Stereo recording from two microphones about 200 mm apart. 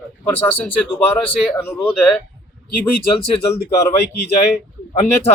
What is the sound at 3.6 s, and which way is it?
Speech, 15° left (ahead or behind).